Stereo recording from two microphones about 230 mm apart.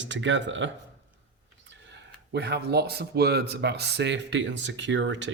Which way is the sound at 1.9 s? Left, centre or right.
Right.